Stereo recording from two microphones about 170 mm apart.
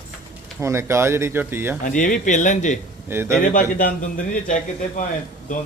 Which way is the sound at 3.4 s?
50° left (ahead or behind).